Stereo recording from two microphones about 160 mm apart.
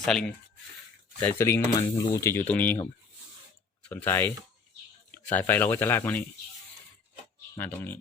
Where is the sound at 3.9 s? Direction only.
15° left (ahead or behind).